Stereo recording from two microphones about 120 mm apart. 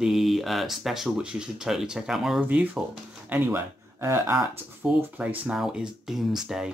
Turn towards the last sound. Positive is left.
turn(degrees=-5)  # may be behind; listen again after turning